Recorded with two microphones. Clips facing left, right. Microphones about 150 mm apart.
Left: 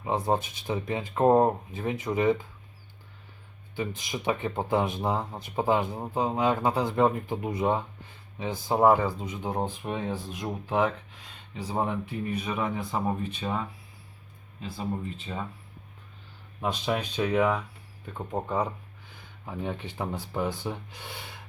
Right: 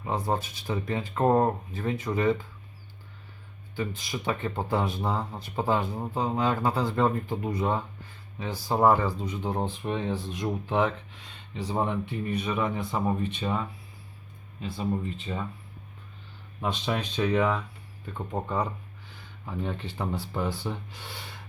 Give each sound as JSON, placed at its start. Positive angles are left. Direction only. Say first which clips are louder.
{"t": 0.0, "sound": "speech", "louder": "left 2 dB", "side_deg": 20}
{"t": 3.8, "sound": "speech", "louder": "even", "side_deg": 20}
{"t": 16.6, "sound": "speech", "louder": "left 1 dB", "side_deg": 10}